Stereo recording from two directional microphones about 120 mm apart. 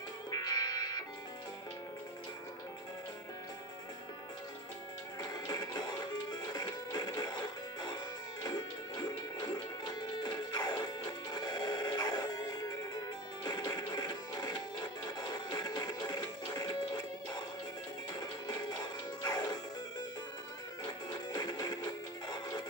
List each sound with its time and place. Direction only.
0.3 s music: 35° left (ahead or behind)
5.5 s music: 35° left (ahead or behind)
9.9 s music: 35° left (ahead or behind)
19.2 s music: 35° left (ahead or behind)
20.8 s music: 35° left (ahead or behind)